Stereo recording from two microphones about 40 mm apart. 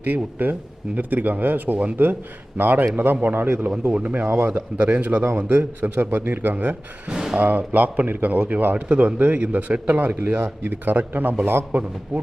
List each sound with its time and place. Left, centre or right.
0.0 s a man's voice: right
3.9 s a man's voice: right
4.3 s speech: right
4.9 s a man's voice: right
5.5 s a man's voice: right
7.1 s speech: centre
7.3 s a man's voice: right
11.7 s a man's voice: right